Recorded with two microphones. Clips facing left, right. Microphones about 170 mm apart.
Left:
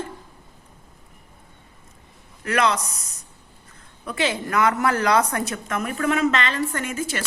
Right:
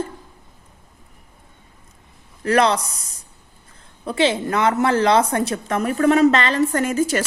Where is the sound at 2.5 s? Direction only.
35° right (ahead or behind).